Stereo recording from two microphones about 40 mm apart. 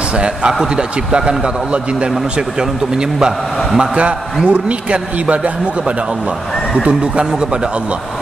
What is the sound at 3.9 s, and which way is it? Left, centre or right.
A man's voice, right.